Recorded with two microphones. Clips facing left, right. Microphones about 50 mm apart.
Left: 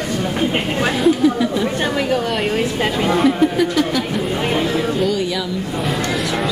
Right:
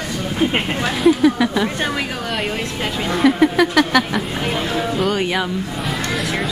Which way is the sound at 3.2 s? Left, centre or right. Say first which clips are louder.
Right 5 dB; right.